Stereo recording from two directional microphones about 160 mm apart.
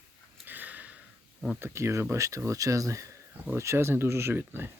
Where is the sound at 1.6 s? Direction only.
15° right (ahead or behind).